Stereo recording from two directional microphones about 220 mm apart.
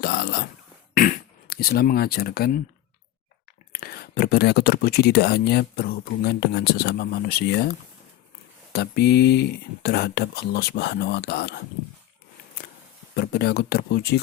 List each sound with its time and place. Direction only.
0.0 s a sound: 45° left (ahead or behind)
0.9 s speech: 40° left (ahead or behind)
3.7 s speech: 40° left (ahead or behind)
8.7 s speech: 45° left (ahead or behind)
13.1 s speech: 45° left (ahead or behind)